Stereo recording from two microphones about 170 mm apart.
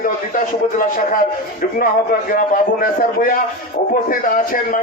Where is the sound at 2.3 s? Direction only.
55° left (ahead or behind).